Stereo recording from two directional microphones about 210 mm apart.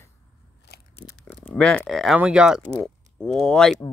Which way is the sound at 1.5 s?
5° left (ahead or behind).